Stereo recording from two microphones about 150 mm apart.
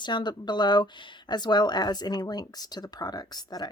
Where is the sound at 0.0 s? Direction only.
30° left (ahead or behind).